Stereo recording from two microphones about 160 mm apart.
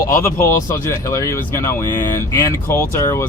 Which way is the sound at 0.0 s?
20° left (ahead or behind).